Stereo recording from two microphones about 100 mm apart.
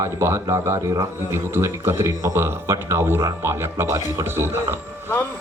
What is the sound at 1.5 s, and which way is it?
A man's voice, 25° right (ahead or behind).